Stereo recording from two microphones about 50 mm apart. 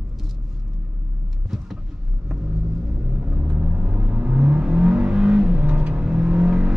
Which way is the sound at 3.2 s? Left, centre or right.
Right.